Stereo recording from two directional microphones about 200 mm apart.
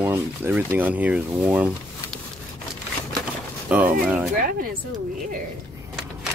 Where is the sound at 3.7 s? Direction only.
5° right (ahead or behind).